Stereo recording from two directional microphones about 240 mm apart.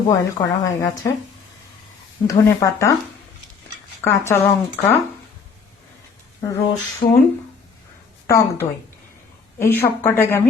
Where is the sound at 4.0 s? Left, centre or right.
Centre.